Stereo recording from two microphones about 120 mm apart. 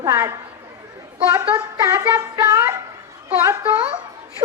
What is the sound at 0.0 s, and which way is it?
A woman's voice, 30° right (ahead or behind).